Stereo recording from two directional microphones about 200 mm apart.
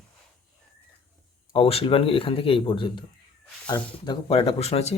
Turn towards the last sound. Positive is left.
turn(degrees=30)  # may be behind; listen again after turning